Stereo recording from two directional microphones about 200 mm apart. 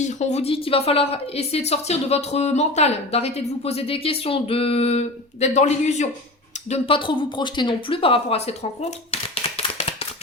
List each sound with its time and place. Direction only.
0.0 s a woman's voice: 35° left (ahead or behind)